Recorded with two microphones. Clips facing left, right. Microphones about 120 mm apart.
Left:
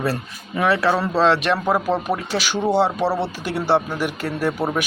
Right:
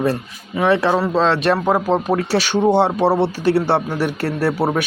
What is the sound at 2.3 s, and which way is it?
Speech, 50° right (ahead or behind).